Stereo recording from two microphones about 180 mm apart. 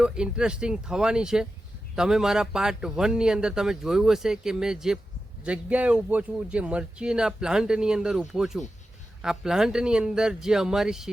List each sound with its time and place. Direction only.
0.0 s a man's voice: 5° right (ahead or behind)